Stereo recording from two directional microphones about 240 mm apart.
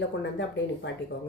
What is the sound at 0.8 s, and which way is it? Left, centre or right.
Speech, left.